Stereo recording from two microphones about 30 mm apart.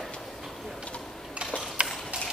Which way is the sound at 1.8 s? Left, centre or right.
Right.